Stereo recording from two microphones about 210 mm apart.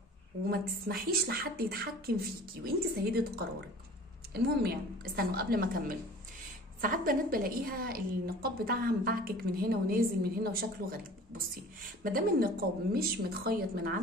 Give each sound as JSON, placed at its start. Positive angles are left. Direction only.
{"t": 0.5, "sound": "a woman's voice", "side_deg": -45}